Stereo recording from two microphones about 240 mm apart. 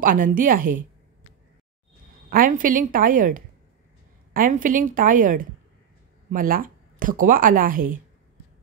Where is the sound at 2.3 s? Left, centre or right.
Right.